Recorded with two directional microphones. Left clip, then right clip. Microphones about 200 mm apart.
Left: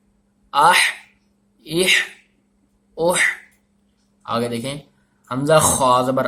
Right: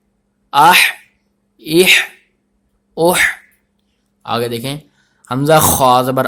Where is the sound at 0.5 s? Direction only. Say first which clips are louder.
Right 6 dB; 50° right (ahead or behind).